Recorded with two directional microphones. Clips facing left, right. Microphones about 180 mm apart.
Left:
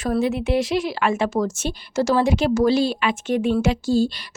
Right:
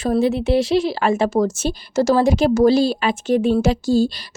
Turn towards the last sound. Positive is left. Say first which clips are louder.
# right 2 dB
turn(degrees=-40)  # may be behind; listen again after turning